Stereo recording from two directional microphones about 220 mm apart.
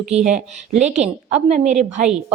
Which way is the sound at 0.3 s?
30° right (ahead or behind).